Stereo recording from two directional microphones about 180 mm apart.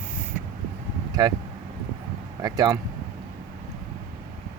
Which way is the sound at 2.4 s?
20° right (ahead or behind).